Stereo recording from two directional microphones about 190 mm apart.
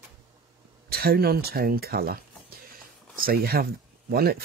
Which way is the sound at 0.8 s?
55° right (ahead or behind).